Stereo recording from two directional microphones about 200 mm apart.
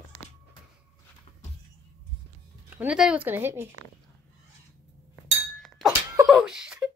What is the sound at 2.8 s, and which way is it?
Speech, 5° right (ahead or behind).